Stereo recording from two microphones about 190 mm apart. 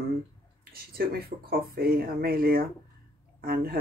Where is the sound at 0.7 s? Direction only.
50° right (ahead or behind).